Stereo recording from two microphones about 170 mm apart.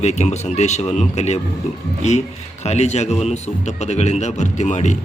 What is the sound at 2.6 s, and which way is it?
A man's voice, 40° left (ahead or behind).